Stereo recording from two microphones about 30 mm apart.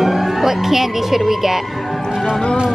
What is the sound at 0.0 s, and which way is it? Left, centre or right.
Speech, centre.